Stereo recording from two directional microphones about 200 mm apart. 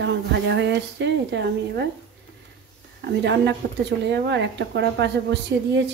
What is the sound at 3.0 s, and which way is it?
Speech, 60° right (ahead or behind).